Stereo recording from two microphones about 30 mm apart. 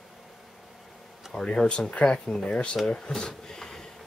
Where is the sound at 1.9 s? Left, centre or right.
Left.